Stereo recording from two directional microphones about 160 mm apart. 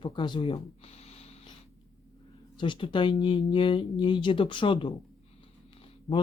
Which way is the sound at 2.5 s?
30° left (ahead or behind).